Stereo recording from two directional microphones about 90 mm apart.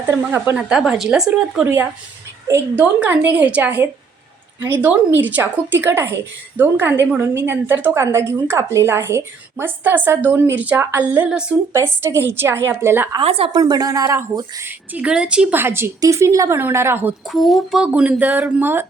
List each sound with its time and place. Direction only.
0.1 s a woman's voice: 20° right (ahead or behind)
0.5 s a woman's voice: 5° right (ahead or behind)
1.6 s a woman's voice: 20° right (ahead or behind)
7.9 s a woman's voice: 30° right (ahead or behind); by 11.5 s 10° right (ahead or behind)
11.7 s a woman's voice: 30° right (ahead or behind)
13.1 s speech: 90° right
13.5 s speech: 45° right (ahead or behind)
14.9 s speech: 10° right (ahead or behind)
15.5 s a woman's voice: 25° right (ahead or behind)
17.2 s a woman's voice: centre (ahead or behind)
17.8 s a woman's voice: 10° right (ahead or behind)